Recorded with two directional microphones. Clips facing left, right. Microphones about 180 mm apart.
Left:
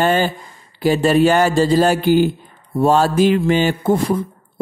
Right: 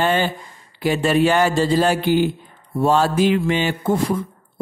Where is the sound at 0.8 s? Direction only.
35° left (ahead or behind).